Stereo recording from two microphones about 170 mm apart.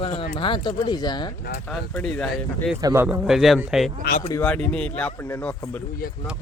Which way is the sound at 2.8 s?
15° right (ahead or behind).